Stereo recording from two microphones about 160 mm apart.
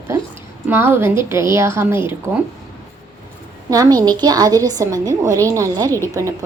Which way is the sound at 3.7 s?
20° right (ahead or behind).